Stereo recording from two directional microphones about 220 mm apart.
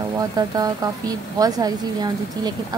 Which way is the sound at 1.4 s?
15° right (ahead or behind).